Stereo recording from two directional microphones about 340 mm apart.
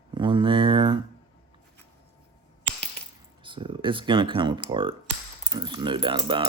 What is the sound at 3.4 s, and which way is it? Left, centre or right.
Speech, centre.